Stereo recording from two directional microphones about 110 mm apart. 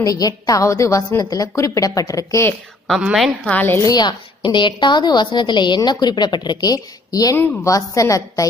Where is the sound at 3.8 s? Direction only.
40° left (ahead or behind).